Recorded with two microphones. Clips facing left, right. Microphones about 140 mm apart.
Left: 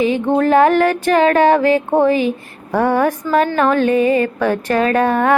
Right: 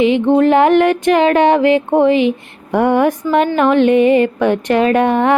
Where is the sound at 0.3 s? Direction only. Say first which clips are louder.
Right 1 dB; 20° right (ahead or behind).